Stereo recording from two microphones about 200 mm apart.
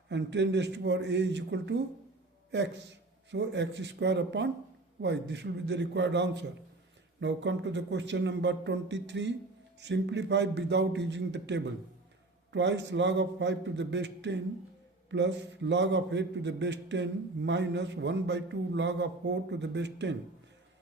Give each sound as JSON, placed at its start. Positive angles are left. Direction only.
{"t": 0.1, "sound": "a man's voice", "side_deg": -60}